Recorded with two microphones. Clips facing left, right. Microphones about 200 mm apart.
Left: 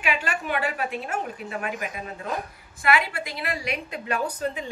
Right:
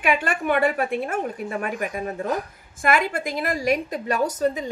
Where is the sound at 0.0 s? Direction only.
55° right (ahead or behind).